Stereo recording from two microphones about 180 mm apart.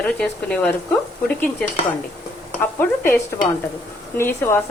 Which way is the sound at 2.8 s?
10° left (ahead or behind).